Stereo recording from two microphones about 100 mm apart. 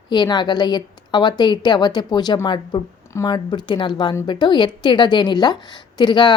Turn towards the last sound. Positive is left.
turn(degrees=50)  # may be behind; listen again after turning